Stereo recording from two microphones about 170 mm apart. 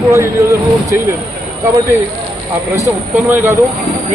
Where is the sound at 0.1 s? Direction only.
15° right (ahead or behind).